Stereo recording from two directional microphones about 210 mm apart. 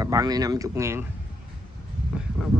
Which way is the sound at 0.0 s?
15° right (ahead or behind).